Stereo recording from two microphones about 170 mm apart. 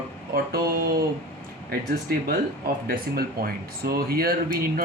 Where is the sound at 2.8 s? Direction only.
60° right (ahead or behind).